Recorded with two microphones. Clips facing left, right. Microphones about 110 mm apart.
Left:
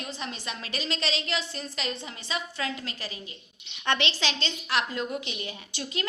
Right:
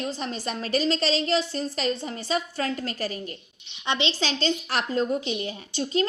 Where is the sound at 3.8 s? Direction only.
20° right (ahead or behind).